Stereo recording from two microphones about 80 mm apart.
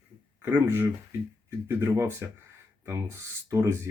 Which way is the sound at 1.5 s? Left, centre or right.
Right.